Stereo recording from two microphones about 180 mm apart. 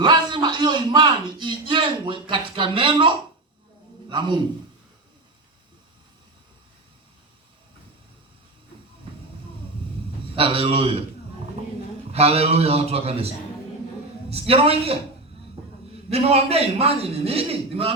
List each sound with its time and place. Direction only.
0.0 s a man's voice: 25° right (ahead or behind)
10.3 s a man's voice: 30° right (ahead or behind)
12.1 s a man's voice: 35° right (ahead or behind)
16.0 s a man's voice: 35° right (ahead or behind)